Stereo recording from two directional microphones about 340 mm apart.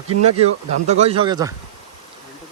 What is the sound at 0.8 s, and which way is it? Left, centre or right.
Speech, centre.